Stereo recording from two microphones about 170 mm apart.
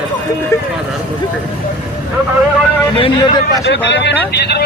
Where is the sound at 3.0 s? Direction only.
30° left (ahead or behind).